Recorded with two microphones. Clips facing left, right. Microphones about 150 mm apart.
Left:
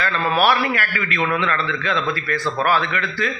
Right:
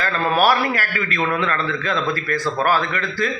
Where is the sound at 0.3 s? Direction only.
40° right (ahead or behind).